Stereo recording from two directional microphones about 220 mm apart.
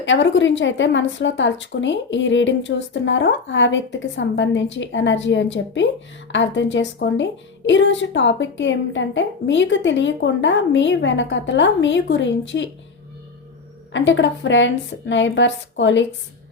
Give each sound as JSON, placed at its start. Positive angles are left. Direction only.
{"t": 0.0, "sound": "a woman's voice", "side_deg": 55}
{"t": 13.9, "sound": "a woman's voice", "side_deg": 55}